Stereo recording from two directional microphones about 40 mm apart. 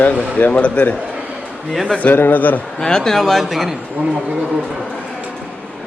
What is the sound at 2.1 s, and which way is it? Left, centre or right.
Speech, left.